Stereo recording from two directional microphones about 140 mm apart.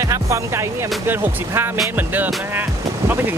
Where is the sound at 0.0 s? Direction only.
20° right (ahead or behind).